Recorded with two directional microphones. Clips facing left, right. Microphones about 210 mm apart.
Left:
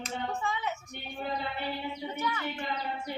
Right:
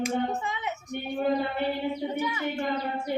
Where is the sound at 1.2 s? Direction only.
50° right (ahead or behind).